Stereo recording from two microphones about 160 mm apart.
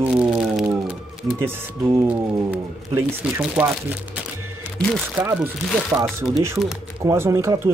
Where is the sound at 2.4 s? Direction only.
10° right (ahead or behind).